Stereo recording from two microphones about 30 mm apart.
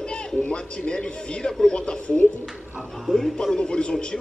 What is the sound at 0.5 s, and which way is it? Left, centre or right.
Speech, left.